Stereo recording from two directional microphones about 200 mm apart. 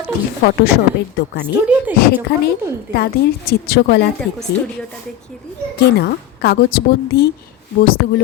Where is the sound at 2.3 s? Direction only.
50° left (ahead or behind).